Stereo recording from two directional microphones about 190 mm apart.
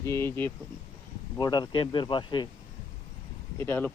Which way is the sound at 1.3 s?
20° left (ahead or behind).